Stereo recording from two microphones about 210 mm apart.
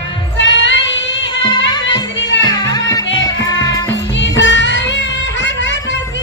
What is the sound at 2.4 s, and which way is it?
Music, 20° left (ahead or behind).